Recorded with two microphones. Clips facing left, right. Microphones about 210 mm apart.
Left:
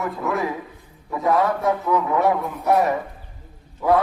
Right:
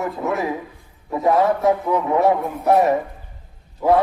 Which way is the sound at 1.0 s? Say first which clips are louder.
Right 4 dB; 20° right (ahead or behind).